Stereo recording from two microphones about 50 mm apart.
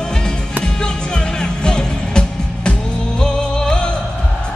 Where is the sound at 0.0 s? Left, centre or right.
Centre.